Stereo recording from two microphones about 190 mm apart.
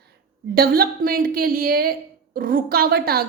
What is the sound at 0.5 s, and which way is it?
A woman's voice, 50° right (ahead or behind).